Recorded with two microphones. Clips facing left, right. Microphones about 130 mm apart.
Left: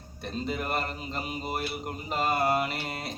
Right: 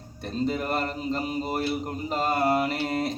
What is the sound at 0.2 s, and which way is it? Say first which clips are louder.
Mantra: right 5 dB; 40° right (ahead or behind).